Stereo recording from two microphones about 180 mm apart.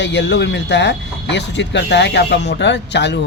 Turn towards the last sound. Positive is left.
turn(degrees=75)  # may be behind; listen again after turning